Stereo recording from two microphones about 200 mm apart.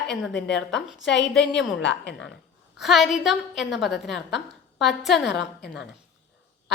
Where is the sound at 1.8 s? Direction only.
65° left (ahead or behind).